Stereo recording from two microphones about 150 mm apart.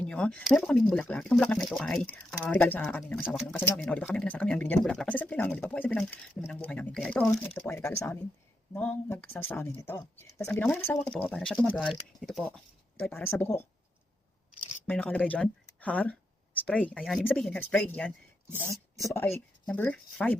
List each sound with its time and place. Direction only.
0.0 s speech: 5° left (ahead or behind)
3.2 s speech: centre (ahead or behind); by 13.7 s 15° left (ahead or behind)
14.8 s speech: 10° left (ahead or behind)